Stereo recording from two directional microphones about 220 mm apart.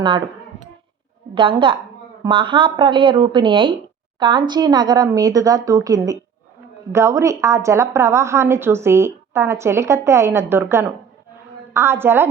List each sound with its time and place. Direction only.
1.4 s a woman's voice: 20° right (ahead or behind)